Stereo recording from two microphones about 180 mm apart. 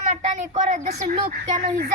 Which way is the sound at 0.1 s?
40° right (ahead or behind).